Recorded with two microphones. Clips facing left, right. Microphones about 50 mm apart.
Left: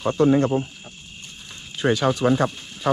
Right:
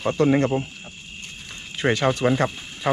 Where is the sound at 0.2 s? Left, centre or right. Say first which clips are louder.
Left 2 dB; right.